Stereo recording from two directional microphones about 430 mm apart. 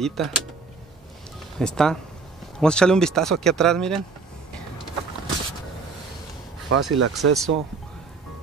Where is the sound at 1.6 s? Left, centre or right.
Centre.